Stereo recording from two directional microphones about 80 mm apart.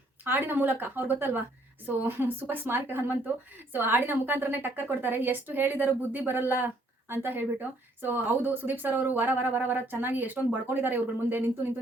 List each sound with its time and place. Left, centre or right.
0.3 s speech: right